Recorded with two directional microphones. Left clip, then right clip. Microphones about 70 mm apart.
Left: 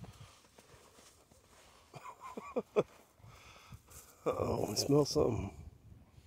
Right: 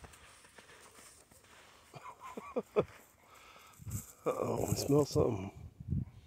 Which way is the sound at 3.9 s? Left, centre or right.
Centre.